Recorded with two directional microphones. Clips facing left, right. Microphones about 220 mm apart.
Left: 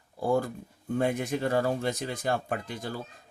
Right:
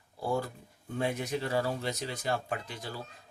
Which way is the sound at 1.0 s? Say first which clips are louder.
Left 4 dB; 50° left (ahead or behind).